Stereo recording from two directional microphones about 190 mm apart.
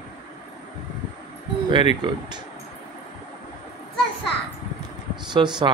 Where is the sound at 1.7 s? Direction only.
25° right (ahead or behind).